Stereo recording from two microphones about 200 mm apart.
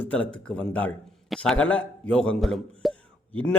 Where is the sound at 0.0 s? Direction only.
5° left (ahead or behind).